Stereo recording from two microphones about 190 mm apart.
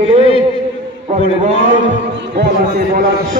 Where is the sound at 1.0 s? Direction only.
35° right (ahead or behind).